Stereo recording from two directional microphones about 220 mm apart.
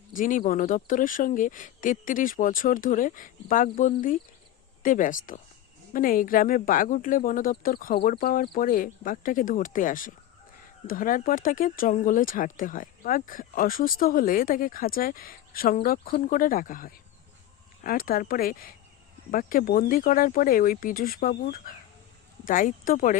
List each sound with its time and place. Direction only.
0.1 s speech: 35° left (ahead or behind)